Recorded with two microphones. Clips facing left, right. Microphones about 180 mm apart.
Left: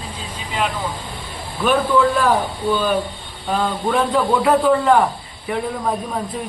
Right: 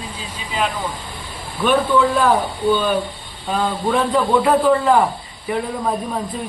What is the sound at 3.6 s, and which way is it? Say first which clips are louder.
A man's voice: right 1 dB; centre (ahead or behind).